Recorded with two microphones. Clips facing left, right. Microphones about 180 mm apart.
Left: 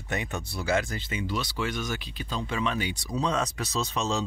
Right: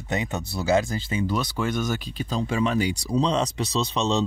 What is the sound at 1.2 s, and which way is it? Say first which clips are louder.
Speech: right 4 dB; 45° right (ahead or behind).